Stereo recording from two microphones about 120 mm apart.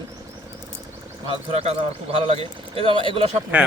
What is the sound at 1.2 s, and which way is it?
Speech, 50° right (ahead or behind).